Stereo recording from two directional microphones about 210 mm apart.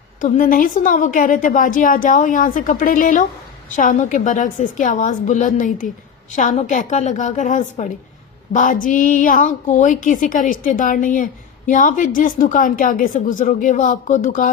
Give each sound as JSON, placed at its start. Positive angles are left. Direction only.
{"t": 0.2, "sound": "a woman's voice", "side_deg": 40}